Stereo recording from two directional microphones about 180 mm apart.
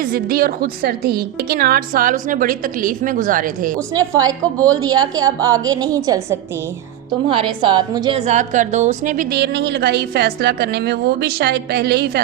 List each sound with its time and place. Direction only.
0.0 s a woman's voice: 55° right (ahead or behind)
3.9 s a woman's voice: 20° right (ahead or behind)
7.3 s a woman's voice: 30° right (ahead or behind)
8.3 s a woman's voice: 45° right (ahead or behind); by 12.2 s 60° right (ahead or behind)